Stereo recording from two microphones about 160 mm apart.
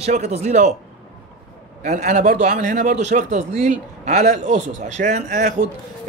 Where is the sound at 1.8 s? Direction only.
50° right (ahead or behind).